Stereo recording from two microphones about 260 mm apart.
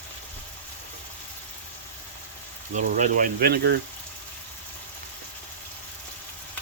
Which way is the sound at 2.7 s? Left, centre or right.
Right.